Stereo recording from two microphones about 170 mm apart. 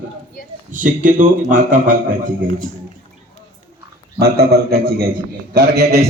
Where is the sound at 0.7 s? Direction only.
50° right (ahead or behind).